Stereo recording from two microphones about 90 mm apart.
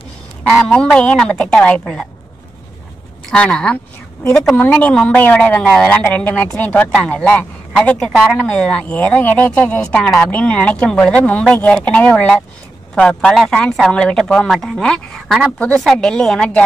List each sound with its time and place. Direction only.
0.7 s speech: 10° left (ahead or behind)
3.3 s speech: 10° left (ahead or behind)
4.6 s a woman's voice: 20° left (ahead or behind)